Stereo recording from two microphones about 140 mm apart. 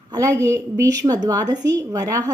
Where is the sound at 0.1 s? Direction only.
20° right (ahead or behind).